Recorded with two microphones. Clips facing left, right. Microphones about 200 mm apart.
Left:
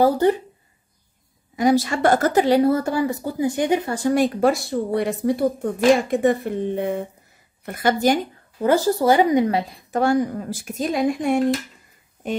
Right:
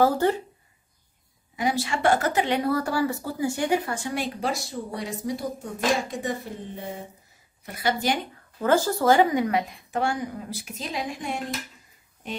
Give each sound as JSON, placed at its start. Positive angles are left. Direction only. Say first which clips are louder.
{"t": 0.0, "sound": "speech", "louder": "left 4 dB", "side_deg": 15}
{"t": 1.6, "sound": "a woman's voice", "louder": "left 7 dB", "side_deg": 40}
{"t": 3.9, "sound": "speech", "louder": "left 10 dB", "side_deg": 40}
{"t": 8.5, "sound": "a woman's voice", "louder": "left 4 dB", "side_deg": 15}